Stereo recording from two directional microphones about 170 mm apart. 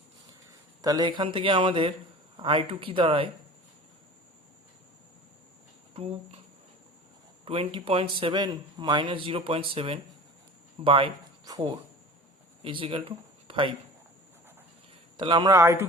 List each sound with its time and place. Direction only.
0.8 s a man's voice: 20° right (ahead or behind)
5.9 s speech: 35° right (ahead or behind)
7.4 s speech: 35° right (ahead or behind)
15.2 s a man's voice: 25° right (ahead or behind)